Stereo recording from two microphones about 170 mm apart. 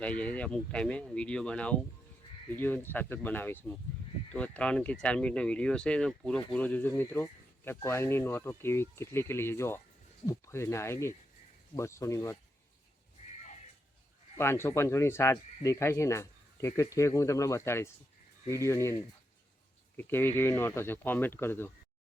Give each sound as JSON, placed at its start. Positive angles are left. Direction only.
{"t": 0.0, "sound": "speech", "side_deg": 10}
{"t": 13.2, "sound": "a sound", "side_deg": 35}
{"t": 14.3, "sound": "speech", "side_deg": 15}
{"t": 20.0, "sound": "speech", "side_deg": 10}